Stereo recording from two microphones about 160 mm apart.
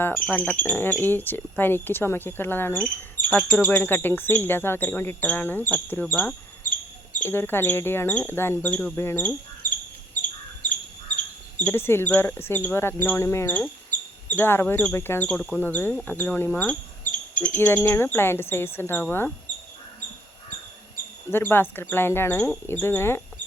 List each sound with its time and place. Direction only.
0.0 s speech: 10° left (ahead or behind)
6.7 s a sound: 55° left (ahead or behind)
7.3 s speech: 15° left (ahead or behind)
10.6 s a sound: 50° left (ahead or behind)
11.6 s speech: 15° left (ahead or behind)
21.2 s speech: 15° left (ahead or behind)